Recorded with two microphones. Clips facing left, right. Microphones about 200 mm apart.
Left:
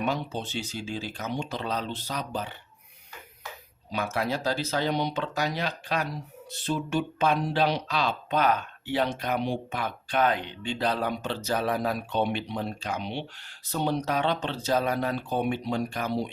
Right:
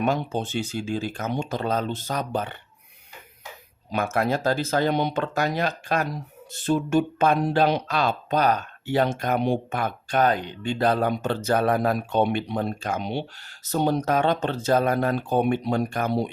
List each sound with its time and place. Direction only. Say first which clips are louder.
0.0 s speech: right 5 dB; 50° right (ahead or behind)
3.9 s speech: right 5 dB; 50° right (ahead or behind)